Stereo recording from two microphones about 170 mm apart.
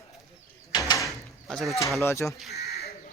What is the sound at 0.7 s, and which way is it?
Door, 25° left (ahead or behind).